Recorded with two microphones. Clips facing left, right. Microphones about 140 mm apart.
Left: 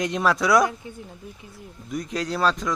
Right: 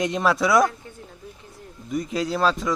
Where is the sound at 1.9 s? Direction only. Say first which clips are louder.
Right 3 dB; centre (ahead or behind).